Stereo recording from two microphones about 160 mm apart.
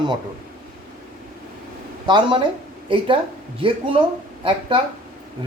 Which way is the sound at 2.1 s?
30° right (ahead or behind).